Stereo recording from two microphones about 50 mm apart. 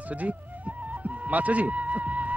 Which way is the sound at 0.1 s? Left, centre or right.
Right.